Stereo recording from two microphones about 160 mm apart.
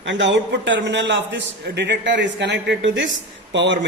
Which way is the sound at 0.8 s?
90° right.